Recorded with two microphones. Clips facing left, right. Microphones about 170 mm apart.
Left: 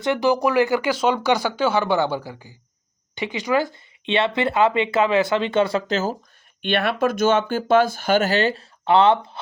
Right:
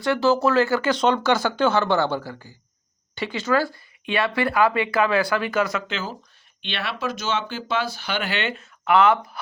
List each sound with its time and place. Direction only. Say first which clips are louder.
0.0 s speech: even; 15° left (ahead or behind); by 6.1 s 40° left (ahead or behind)
6.6 s speech: left 9 dB; 50° left (ahead or behind); by 9.4 s 25° left (ahead or behind)